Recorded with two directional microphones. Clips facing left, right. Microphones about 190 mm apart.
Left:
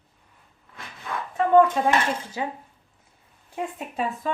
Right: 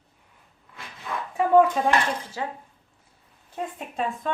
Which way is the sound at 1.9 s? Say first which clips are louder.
Left 1 dB; 15° left (ahead or behind).